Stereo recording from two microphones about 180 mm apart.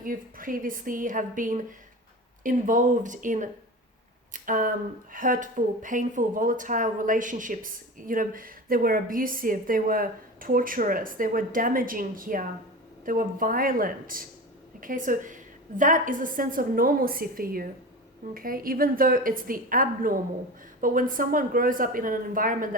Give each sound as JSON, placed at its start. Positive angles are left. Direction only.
{"t": 0.0, "sound": "speech", "side_deg": -50}
{"t": 4.3, "sound": "a sound", "side_deg": -50}
{"t": 5.1, "sound": "speech", "side_deg": -50}